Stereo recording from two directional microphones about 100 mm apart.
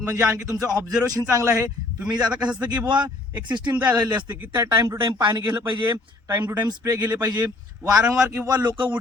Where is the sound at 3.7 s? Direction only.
15° right (ahead or behind).